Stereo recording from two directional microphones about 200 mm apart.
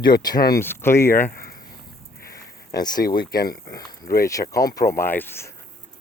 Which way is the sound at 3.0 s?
50° left (ahead or behind).